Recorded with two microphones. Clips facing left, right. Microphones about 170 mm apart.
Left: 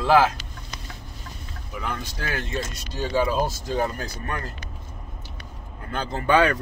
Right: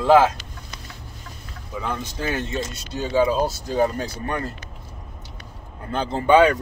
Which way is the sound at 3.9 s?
25° right (ahead or behind).